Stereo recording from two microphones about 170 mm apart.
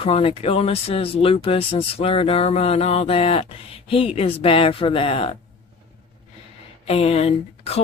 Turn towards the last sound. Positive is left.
turn(degrees=35)  # may be behind; listen again after turning